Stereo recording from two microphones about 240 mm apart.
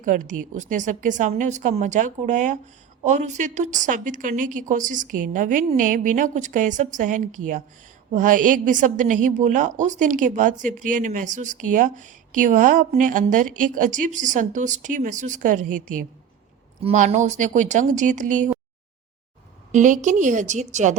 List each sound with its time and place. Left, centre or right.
0.0 s a woman's voice: right
19.7 s a woman's voice: right